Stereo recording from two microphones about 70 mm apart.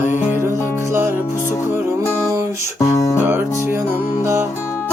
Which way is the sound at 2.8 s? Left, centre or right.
Left.